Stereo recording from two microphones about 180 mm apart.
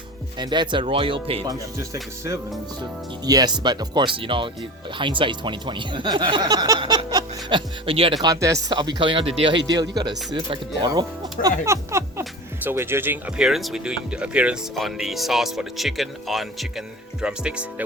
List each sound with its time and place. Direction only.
0.3 s speech: 25° right (ahead or behind)
1.5 s speech: 20° right (ahead or behind)
8.2 s speech: 20° right (ahead or behind)
11.6 s a sound: 15° right (ahead or behind)
12.6 s speech: 15° right (ahead or behind)